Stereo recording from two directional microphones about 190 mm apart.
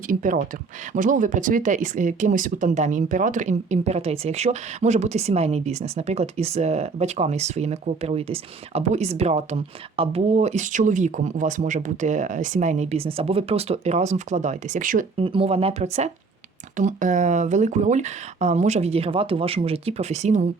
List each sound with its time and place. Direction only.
0.1 s speech: 45° right (ahead or behind)
15.2 s speech: 30° right (ahead or behind)